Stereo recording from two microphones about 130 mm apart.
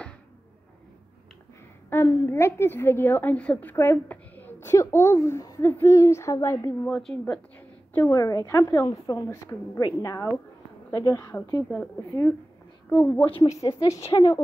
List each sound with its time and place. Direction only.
2.0 s a woman's voice: 25° left (ahead or behind)
6.9 s a woman's voice: 5° left (ahead or behind)
8.1 s a woman's voice: 25° left (ahead or behind)